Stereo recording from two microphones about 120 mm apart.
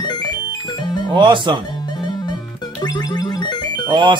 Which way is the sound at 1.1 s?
40° right (ahead or behind).